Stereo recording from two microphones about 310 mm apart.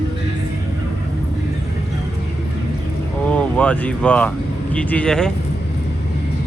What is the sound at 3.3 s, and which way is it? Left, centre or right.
Speech, centre.